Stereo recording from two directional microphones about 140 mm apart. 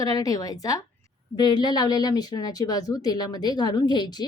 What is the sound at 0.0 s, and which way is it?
A woman's voice, 25° left (ahead or behind).